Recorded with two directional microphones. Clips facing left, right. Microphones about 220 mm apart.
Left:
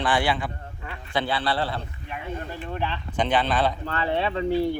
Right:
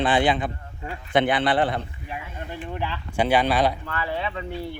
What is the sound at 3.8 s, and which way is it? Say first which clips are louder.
Speech: left 3 dB; 30° left (ahead or behind).